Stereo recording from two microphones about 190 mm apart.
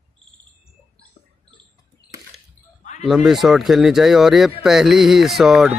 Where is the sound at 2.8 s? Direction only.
40° left (ahead or behind).